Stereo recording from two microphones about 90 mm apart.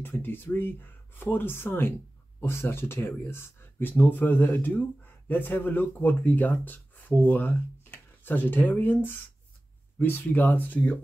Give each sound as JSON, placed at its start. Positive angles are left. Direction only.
{"t": 0.2, "sound": "speech", "side_deg": 25}
{"t": 9.9, "sound": "speech", "side_deg": 20}